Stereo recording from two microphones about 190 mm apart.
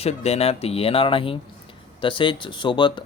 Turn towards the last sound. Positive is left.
turn(degrees=25)  # may be behind; listen again after turning